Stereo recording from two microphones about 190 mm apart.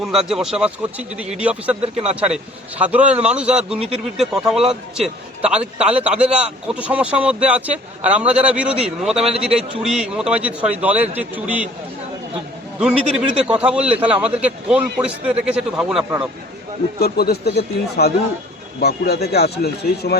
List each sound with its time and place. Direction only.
0.0 s a man's voice: centre (ahead or behind)
12.8 s a man's voice: 5° right (ahead or behind)
17.0 s speech: 55° left (ahead or behind)